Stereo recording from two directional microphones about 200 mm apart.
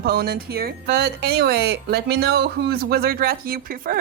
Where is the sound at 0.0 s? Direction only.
50° right (ahead or behind).